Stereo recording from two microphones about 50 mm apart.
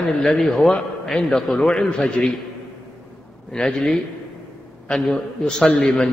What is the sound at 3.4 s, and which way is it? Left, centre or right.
A man's voice, centre.